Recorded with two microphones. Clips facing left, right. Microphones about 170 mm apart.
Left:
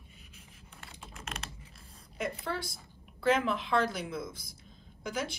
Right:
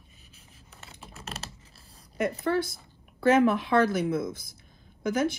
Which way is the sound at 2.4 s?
55° right (ahead or behind).